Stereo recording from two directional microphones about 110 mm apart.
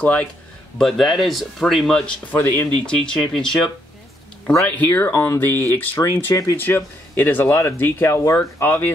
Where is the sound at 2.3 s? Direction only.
15° left (ahead or behind).